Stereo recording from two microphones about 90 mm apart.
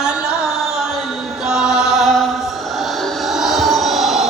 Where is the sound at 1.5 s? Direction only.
5° right (ahead or behind).